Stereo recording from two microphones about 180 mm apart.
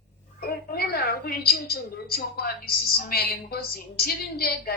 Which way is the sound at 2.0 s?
60° left (ahead or behind).